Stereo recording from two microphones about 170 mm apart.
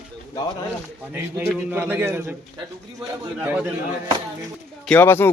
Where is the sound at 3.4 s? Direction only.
10° right (ahead or behind).